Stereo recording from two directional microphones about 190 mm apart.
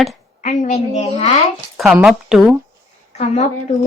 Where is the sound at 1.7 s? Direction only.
5° right (ahead or behind).